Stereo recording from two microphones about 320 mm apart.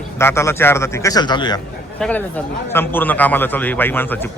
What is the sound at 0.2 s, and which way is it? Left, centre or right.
A man's voice, centre.